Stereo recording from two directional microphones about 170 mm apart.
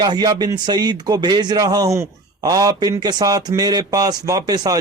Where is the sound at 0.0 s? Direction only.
25° right (ahead or behind).